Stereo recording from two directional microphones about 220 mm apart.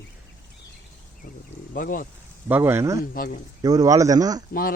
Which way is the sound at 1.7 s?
40° left (ahead or behind).